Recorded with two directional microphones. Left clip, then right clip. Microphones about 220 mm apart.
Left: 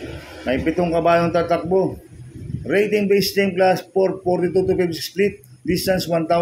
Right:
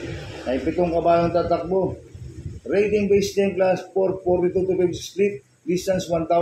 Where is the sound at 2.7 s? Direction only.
45° left (ahead or behind).